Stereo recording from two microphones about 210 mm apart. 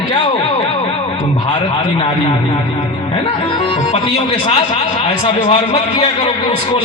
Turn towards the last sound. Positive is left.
turn(degrees=25)  # may be behind; listen again after turning